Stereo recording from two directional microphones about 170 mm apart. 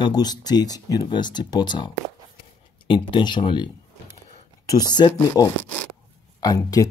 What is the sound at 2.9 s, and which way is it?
Speech, 30° left (ahead or behind).